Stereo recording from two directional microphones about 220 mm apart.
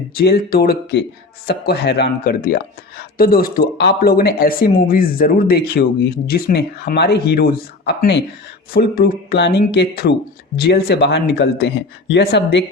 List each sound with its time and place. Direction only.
0.2 s speech: 45° left (ahead or behind)